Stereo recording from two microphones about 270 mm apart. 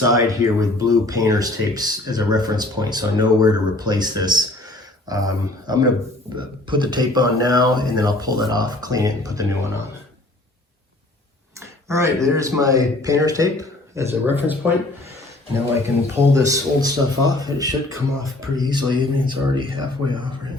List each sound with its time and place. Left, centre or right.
0.0 s speech: centre
11.9 s speech: centre
16.1 s speech: centre